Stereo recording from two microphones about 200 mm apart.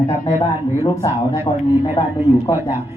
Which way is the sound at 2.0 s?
15° left (ahead or behind).